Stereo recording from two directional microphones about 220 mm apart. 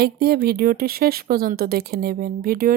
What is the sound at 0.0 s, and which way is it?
Speech, 45° right (ahead or behind).